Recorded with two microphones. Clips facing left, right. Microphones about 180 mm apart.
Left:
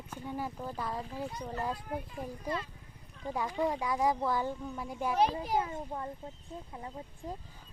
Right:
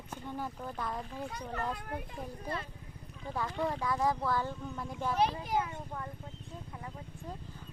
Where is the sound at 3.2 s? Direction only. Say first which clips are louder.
Left 2 dB; 15° left (ahead or behind).